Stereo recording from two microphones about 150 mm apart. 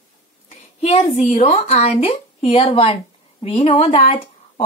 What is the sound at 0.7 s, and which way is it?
A woman's voice, 45° left (ahead or behind).